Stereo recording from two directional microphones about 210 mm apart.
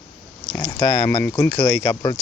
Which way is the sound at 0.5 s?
10° left (ahead or behind).